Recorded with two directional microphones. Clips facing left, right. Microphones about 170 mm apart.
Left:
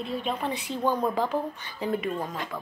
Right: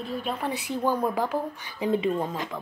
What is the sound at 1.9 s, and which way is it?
Speech, 20° right (ahead or behind).